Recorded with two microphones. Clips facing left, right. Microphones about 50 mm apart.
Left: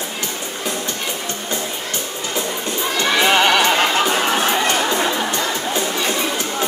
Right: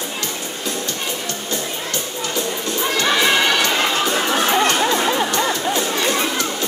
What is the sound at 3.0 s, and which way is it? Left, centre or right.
Neigh, left.